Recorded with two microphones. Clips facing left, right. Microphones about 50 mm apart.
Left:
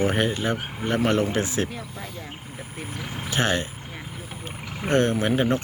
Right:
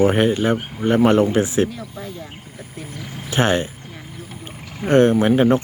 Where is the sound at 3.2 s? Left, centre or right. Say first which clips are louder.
Right 6 dB; right.